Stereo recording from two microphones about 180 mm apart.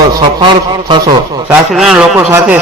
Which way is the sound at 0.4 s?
25° right (ahead or behind).